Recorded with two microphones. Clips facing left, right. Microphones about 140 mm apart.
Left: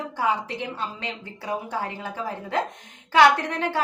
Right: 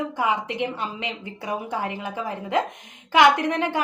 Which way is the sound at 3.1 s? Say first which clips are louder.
Right 1 dB; 15° right (ahead or behind).